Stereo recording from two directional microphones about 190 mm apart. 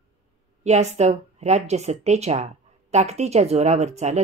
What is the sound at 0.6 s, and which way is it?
Speech, 35° right (ahead or behind).